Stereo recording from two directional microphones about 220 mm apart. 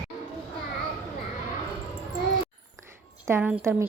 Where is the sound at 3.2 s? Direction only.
10° right (ahead or behind).